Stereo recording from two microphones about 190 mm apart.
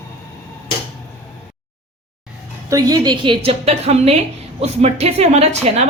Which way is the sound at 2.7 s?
20° right (ahead or behind).